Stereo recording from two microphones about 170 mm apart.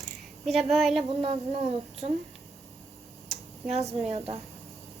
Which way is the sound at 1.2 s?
35° right (ahead or behind).